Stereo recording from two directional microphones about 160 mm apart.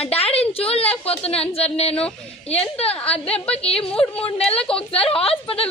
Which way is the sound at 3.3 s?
5° left (ahead or behind).